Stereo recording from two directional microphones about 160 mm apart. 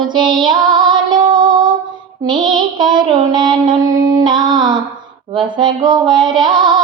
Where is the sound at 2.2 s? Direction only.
30° right (ahead or behind).